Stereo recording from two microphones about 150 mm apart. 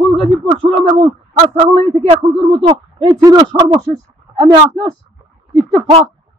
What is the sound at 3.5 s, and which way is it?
A man's voice, 35° right (ahead or behind).